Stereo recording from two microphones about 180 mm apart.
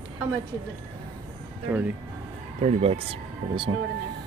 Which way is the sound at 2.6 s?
35° right (ahead or behind).